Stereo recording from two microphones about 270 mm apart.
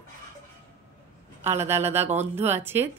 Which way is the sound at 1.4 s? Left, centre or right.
Centre.